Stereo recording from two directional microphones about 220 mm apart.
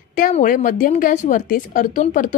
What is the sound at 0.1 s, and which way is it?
A woman's voice, 35° left (ahead or behind).